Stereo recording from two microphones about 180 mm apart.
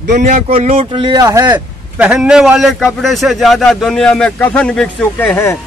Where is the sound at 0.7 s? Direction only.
25° right (ahead or behind).